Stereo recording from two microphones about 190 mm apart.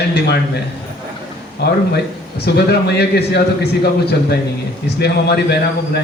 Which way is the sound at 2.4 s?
60° left (ahead or behind).